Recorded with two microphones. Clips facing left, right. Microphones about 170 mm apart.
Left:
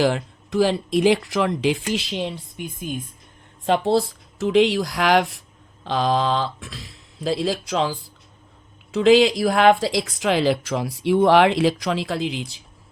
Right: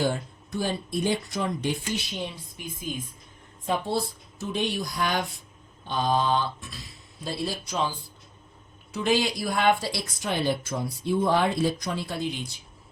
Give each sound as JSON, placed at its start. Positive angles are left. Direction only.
{"t": 0.0, "sound": "speech", "side_deg": 90}
{"t": 2.6, "sound": "speech", "side_deg": 60}
{"t": 3.7, "sound": "speech", "side_deg": 90}
{"t": 6.7, "sound": "a sound", "side_deg": 0}
{"t": 7.3, "sound": "speech", "side_deg": 90}
{"t": 11.0, "sound": "speech", "side_deg": 75}